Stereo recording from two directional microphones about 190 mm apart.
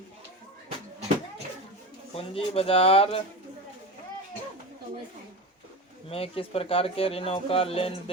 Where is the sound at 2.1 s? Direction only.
30° left (ahead or behind).